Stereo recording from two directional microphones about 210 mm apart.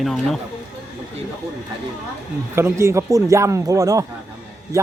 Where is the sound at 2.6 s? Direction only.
10° right (ahead or behind).